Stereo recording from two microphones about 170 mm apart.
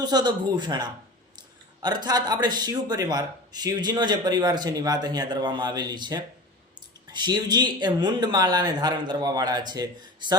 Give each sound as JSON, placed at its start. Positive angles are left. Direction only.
{"t": 0.0, "sound": "a man's voice", "side_deg": -25}